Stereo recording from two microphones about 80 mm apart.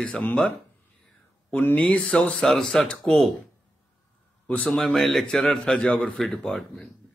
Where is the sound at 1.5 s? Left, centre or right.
Centre.